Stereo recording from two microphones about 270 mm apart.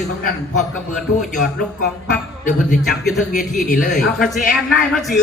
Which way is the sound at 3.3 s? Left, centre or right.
Left.